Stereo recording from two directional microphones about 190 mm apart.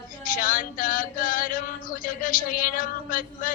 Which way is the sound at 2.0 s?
45° left (ahead or behind).